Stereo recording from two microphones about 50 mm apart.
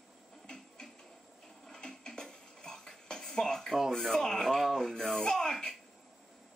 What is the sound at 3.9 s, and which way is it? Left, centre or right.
Speech, centre.